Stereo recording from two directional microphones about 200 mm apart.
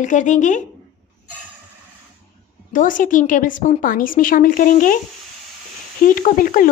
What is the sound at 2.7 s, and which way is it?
A woman's voice, 40° left (ahead or behind).